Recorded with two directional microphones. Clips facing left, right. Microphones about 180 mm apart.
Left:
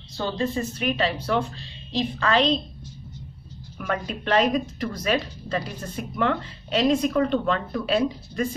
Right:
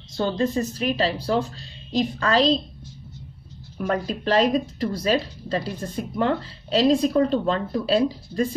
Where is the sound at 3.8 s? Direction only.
35° right (ahead or behind).